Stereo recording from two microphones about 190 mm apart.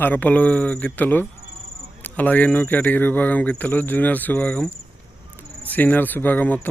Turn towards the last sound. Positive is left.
turn(degrees=10)  # may be behind; listen again after turning